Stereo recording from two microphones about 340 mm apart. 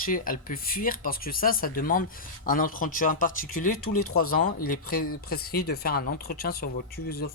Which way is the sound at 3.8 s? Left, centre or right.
Left.